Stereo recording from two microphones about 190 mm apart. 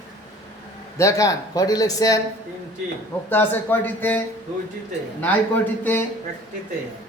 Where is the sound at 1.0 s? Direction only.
15° left (ahead or behind).